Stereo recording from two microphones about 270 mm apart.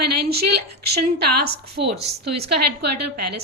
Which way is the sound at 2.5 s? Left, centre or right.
Right.